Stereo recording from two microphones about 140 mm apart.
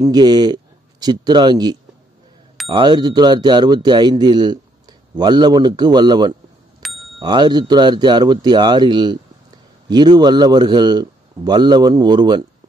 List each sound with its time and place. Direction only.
0.0 s speech: 30° right (ahead or behind)